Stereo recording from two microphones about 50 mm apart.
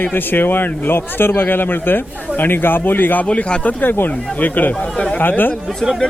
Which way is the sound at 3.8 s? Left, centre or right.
Left.